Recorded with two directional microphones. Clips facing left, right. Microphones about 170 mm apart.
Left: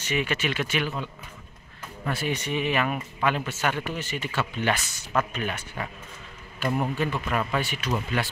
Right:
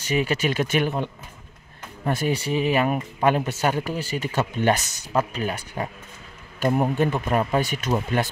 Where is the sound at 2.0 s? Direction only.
40° right (ahead or behind).